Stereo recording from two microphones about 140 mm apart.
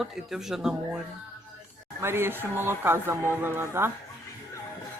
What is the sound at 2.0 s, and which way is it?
Speech, 15° right (ahead or behind).